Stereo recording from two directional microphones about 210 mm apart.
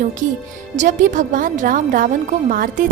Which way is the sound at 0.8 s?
40° right (ahead or behind).